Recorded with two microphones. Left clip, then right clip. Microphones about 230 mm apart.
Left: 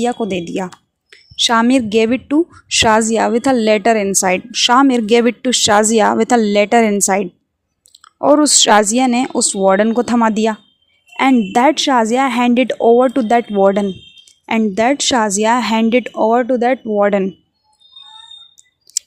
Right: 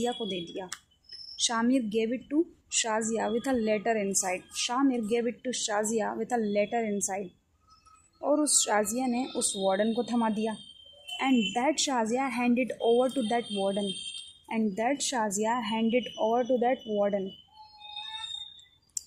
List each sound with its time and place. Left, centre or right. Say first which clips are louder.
0.0 s a woman's voice: left 14 dB; left